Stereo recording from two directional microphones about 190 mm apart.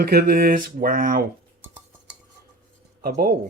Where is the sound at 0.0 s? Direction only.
55° right (ahead or behind).